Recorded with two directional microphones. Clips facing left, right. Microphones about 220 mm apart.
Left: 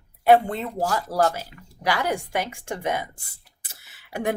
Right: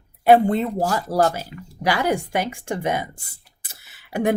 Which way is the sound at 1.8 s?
10° right (ahead or behind).